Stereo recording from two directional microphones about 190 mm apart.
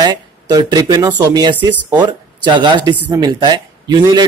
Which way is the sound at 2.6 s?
25° right (ahead or behind).